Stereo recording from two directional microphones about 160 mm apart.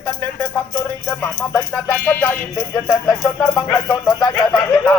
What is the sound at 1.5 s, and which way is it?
Speech, 10° left (ahead or behind).